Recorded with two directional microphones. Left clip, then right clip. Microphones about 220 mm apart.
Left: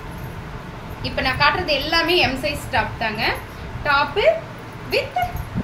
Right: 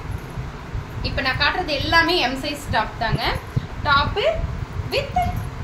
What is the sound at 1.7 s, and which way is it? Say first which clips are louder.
A woman's voice: right 1 dB; 10° right (ahead or behind).